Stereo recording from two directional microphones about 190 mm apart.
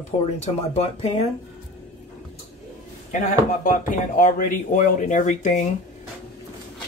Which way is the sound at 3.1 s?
40° left (ahead or behind).